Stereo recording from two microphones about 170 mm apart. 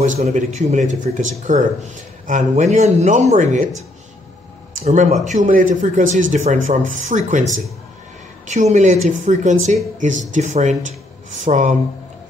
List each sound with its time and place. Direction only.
0.0 s speech: 45° right (ahead or behind)
4.8 s speech: 45° right (ahead or behind)